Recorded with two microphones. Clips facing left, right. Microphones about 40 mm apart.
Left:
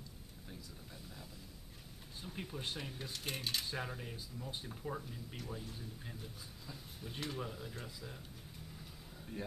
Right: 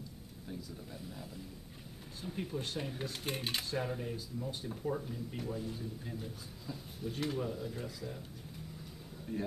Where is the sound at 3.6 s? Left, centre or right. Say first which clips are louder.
Right 5 dB; centre.